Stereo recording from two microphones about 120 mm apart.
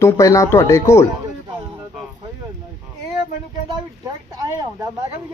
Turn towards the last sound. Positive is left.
turn(degrees=-30)  # may be behind; listen again after turning